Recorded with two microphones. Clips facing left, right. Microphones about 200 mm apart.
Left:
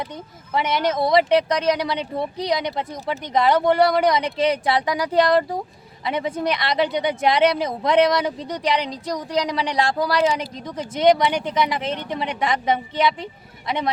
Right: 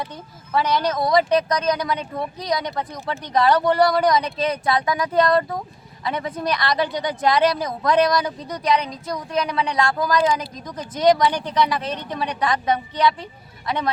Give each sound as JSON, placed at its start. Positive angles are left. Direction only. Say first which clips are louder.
{"t": 0.5, "sound": "a woman's voice", "louder": "even", "side_deg": 25}
{"t": 6.1, "sound": "a woman's voice", "louder": "left 2 dB", "side_deg": 25}